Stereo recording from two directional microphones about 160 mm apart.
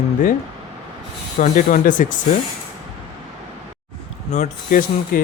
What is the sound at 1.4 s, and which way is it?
Speech, 55° left (ahead or behind).